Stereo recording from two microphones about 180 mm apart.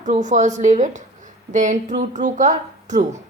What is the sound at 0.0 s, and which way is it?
A woman's voice, 45° right (ahead or behind).